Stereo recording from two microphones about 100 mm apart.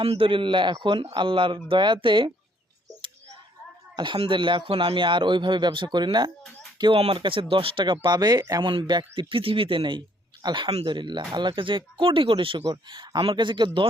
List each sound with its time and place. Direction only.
0.0 s speech: 70° right (ahead or behind)
3.9 s speech: 50° right (ahead or behind)
6.9 s speech: 65° right (ahead or behind)
8.0 s speech: 45° right (ahead or behind)
8.4 s speech: 35° right (ahead or behind)
8.6 s speech: 50° right (ahead or behind)